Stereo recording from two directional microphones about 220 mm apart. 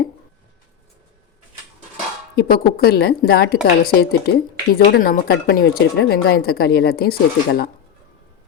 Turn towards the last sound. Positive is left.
turn(degrees=45)  # may be behind; listen again after turning